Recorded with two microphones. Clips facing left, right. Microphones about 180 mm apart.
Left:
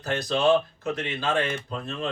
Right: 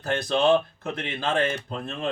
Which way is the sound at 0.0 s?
55° right (ahead or behind).